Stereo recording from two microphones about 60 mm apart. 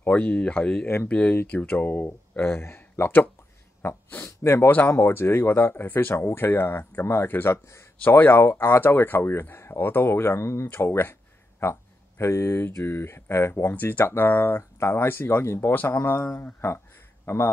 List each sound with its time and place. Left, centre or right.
0.0 s speech: left
2.4 s speech: left
4.6 s speech: left
4.9 s speech: left
8.9 s speech: left
10.8 s speech: left
11.6 s a sound: left
12.7 s speech: left
15.7 s speech: left
16.0 s speech: left